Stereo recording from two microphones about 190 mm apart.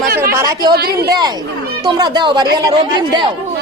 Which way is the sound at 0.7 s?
55° right (ahead or behind).